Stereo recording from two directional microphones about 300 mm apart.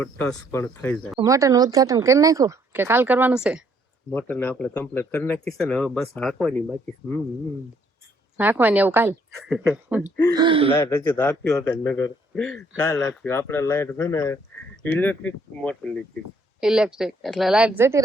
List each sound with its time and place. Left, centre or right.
0.0 s a woman's voice: centre
1.2 s a man's voice: centre
8.4 s a woman's voice: centre
10.4 s speech: centre
10.8 s a man's voice: centre